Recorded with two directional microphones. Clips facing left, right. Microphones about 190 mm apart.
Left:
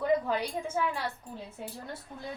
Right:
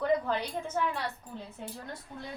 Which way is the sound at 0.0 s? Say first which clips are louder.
Left 1 dB; 10° left (ahead or behind).